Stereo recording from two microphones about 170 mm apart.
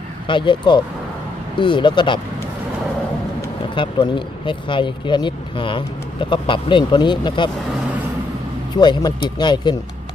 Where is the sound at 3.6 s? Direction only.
30° left (ahead or behind).